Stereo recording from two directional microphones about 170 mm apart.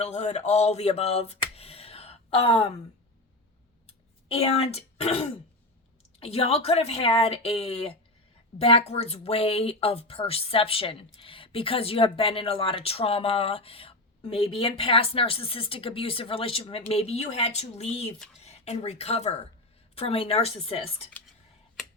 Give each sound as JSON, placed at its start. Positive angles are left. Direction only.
{"t": 0.0, "sound": "a sound", "side_deg": 40}
{"t": 3.8, "sound": "clicking", "side_deg": 35}
{"t": 6.1, "sound": "speech", "side_deg": 35}